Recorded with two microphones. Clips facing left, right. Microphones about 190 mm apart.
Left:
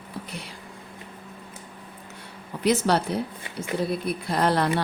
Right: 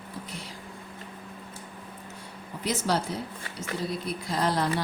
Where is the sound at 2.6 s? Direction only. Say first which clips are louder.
Left 6 dB; 65° left (ahead or behind).